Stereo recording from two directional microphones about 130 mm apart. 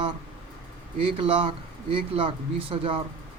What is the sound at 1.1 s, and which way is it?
Speech, 45° right (ahead or behind).